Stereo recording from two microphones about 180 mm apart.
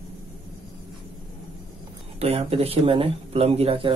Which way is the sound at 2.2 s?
35° right (ahead or behind).